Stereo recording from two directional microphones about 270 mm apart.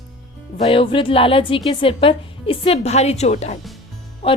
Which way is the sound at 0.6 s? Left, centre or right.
Left.